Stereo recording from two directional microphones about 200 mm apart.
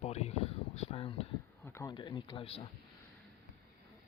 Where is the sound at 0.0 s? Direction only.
30° left (ahead or behind).